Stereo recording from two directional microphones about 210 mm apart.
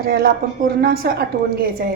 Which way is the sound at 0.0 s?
45° right (ahead or behind).